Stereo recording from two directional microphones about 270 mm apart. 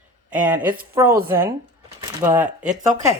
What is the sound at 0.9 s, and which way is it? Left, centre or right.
Speech, centre.